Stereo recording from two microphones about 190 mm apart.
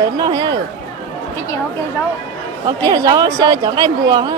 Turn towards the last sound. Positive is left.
turn(degrees=-20)  # may be behind; listen again after turning